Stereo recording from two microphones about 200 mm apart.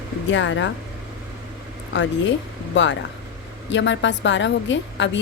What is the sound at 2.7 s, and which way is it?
A woman's voice, 65° left (ahead or behind).